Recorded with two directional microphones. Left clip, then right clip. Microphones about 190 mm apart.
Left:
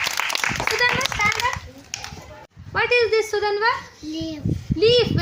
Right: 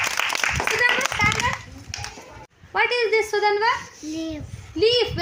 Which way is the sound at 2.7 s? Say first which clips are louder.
Left 2 dB; 40° right (ahead or behind).